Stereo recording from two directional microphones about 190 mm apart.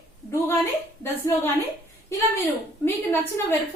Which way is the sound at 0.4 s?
15° left (ahead or behind).